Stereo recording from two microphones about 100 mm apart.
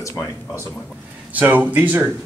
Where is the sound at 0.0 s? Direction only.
30° left (ahead or behind).